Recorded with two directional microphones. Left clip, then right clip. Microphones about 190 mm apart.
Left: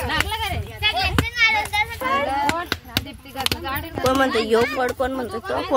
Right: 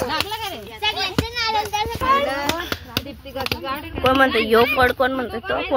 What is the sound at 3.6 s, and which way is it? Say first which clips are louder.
Speech: right 2 dB; 10° left (ahead or behind).